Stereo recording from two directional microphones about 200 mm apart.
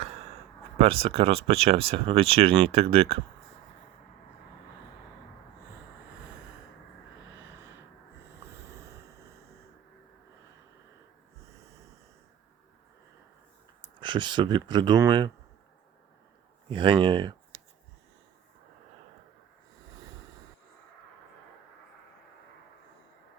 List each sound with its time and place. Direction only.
0.8 s speech: 30° right (ahead or behind)
13.8 s speech: 25° right (ahead or behind)
16.6 s speech: 25° right (ahead or behind)